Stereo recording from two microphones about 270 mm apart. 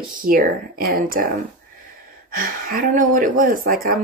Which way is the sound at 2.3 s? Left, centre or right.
Right.